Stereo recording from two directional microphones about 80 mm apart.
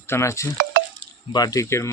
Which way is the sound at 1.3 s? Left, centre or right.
Left.